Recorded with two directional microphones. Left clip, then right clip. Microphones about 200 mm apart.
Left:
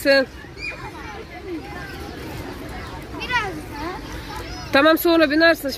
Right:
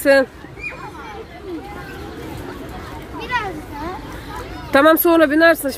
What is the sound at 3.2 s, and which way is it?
Children playing, 10° right (ahead or behind).